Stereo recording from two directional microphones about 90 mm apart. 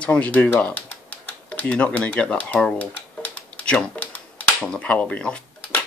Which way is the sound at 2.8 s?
15° left (ahead or behind).